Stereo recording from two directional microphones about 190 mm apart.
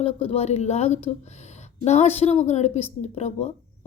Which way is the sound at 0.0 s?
30° left (ahead or behind).